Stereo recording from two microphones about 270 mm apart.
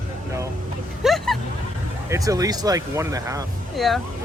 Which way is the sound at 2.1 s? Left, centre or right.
Centre.